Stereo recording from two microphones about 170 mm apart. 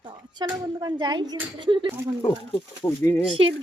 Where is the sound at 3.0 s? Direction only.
15° left (ahead or behind).